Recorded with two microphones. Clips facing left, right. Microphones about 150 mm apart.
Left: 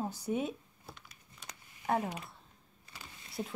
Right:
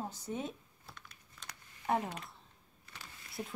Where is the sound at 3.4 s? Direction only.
15° left (ahead or behind).